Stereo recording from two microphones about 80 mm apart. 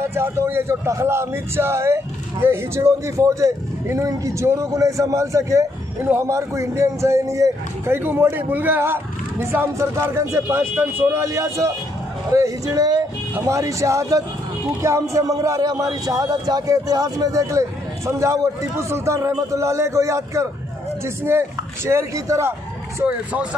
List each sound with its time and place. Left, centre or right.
0.0 s a man's voice: right
7.9 s a man's voice: right
23.0 s speech: centre